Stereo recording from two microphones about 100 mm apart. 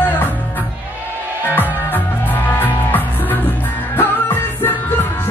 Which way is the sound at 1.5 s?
20° left (ahead or behind).